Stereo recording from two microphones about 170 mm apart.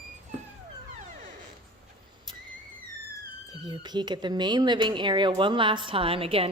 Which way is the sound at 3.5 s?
25° right (ahead or behind).